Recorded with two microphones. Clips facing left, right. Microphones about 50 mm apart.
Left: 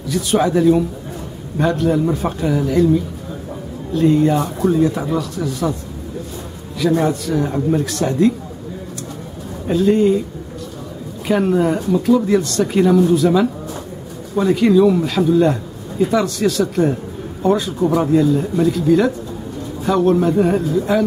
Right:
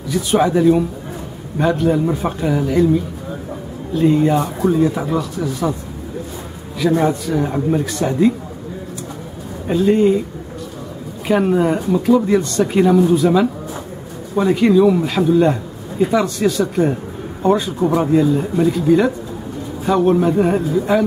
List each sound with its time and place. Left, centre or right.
0.1 s a man's voice: centre
6.8 s a man's voice: centre
9.7 s a man's voice: centre
11.2 s a man's voice: centre